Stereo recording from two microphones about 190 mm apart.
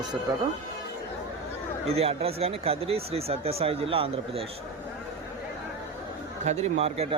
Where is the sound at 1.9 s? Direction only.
30° right (ahead or behind).